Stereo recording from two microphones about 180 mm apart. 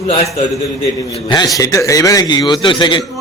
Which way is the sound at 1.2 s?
25° left (ahead or behind).